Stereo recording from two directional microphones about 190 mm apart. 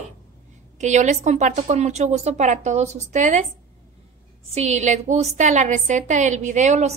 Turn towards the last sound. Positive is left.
turn(degrees=-35)  # may be behind; listen again after turning